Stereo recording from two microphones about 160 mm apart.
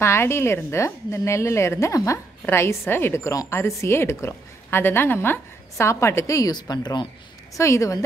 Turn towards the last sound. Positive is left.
turn(degrees=20)  # may be behind; listen again after turning